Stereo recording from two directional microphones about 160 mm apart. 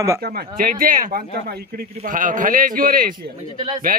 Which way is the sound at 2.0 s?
55° right (ahead or behind).